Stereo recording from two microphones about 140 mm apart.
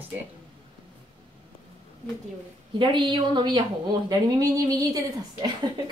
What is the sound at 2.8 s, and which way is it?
A woman's voice, 35° right (ahead or behind).